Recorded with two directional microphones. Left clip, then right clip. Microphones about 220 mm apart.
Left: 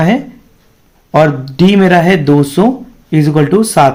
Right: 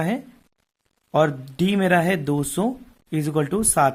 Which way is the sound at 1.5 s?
35° right (ahead or behind).